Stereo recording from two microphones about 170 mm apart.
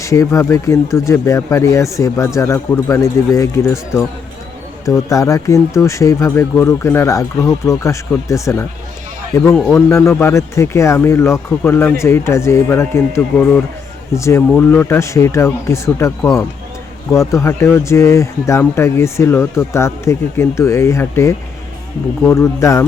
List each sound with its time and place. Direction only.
0.0 s speech: 20° left (ahead or behind)